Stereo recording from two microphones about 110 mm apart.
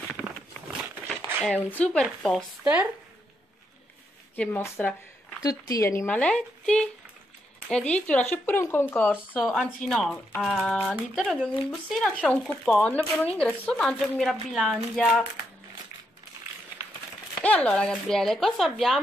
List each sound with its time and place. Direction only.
1.0 s a sound: 5° left (ahead or behind)
1.7 s speech: 10° left (ahead or behind)
2.6 s speech: 15° right (ahead or behind)
4.4 s speech: 20° left (ahead or behind)
5.4 s speech: 35° left (ahead or behind)
6.0 s speech: 10° left (ahead or behind)
9.4 s speech: centre (ahead or behind)
17.4 s speech: 10° left (ahead or behind)